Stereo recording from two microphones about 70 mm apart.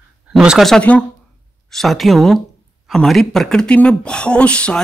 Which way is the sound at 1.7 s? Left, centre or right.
Centre.